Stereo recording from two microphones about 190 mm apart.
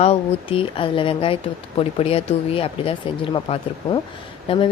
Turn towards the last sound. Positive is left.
turn(degrees=25)  # may be behind; listen again after turning